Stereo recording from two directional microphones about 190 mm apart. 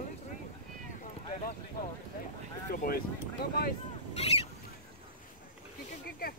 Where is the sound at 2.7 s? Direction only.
50° left (ahead or behind).